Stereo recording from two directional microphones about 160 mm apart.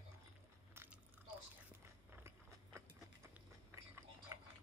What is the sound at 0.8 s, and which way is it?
Biting, 15° right (ahead or behind).